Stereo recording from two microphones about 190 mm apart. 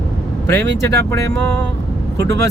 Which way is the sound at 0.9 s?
15° left (ahead or behind).